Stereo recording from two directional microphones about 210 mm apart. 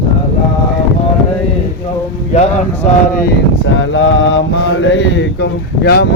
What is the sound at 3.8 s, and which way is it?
Mantra, 65° left (ahead or behind).